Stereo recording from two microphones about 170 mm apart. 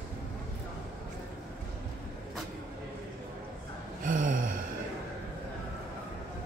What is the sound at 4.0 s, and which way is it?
Gasp, 50° right (ahead or behind).